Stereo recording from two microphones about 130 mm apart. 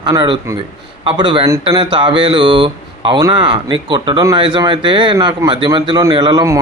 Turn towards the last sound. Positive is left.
turn(degrees=-30)  # may be behind; listen again after turning